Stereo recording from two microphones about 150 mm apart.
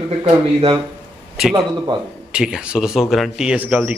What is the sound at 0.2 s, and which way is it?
Speech, 40° right (ahead or behind).